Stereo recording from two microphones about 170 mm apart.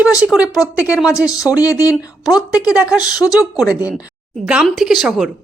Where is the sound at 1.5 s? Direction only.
20° left (ahead or behind).